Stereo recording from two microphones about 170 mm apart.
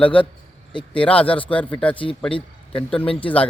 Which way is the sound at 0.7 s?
30° left (ahead or behind).